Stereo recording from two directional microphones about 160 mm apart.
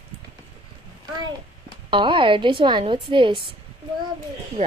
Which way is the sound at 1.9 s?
30° right (ahead or behind).